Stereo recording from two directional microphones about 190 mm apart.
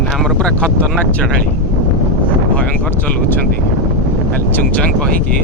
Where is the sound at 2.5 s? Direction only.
10° left (ahead or behind).